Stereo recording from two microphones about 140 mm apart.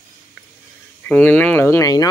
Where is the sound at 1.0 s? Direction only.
10° left (ahead or behind).